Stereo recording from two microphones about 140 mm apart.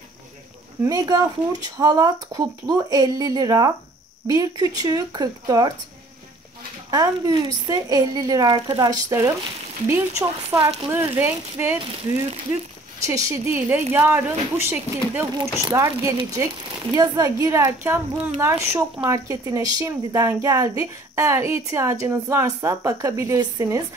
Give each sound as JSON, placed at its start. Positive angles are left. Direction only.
{"t": 0.8, "sound": "a woman's voice", "side_deg": -25}
{"t": 6.9, "sound": "a woman's voice", "side_deg": -30}
{"t": 13.0, "sound": "a woman's voice", "side_deg": -20}